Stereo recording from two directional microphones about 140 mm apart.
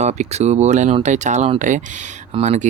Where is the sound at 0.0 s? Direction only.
55° right (ahead or behind).